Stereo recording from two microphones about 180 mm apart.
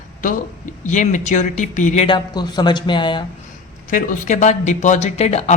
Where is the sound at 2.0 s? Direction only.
25° left (ahead or behind).